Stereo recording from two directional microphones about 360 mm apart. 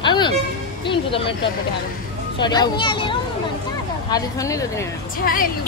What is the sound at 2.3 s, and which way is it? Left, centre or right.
Speech, centre.